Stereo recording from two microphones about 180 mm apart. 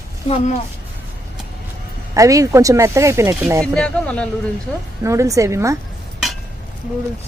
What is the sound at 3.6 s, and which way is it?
Speech, 5° left (ahead or behind).